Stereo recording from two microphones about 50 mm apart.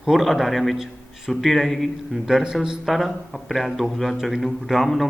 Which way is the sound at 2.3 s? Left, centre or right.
Centre.